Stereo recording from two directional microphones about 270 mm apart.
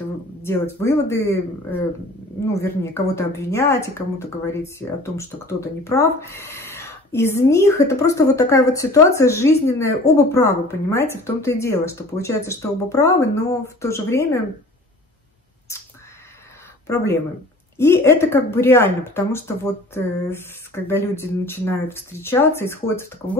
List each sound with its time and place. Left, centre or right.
0.4 s a woman's voice: centre
15.7 s a sound: centre
16.8 s a woman's voice: centre